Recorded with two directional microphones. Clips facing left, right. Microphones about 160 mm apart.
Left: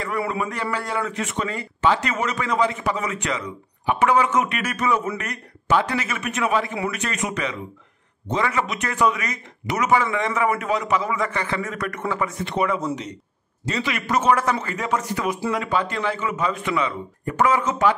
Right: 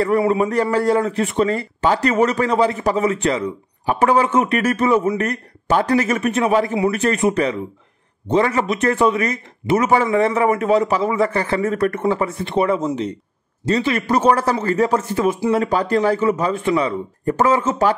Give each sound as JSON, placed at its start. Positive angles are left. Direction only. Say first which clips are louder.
{"t": 0.3, "sound": "a man's voice", "louder": "right 9 dB", "side_deg": -35}